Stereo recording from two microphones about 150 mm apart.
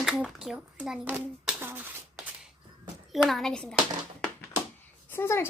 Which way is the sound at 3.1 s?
Centre (ahead or behind).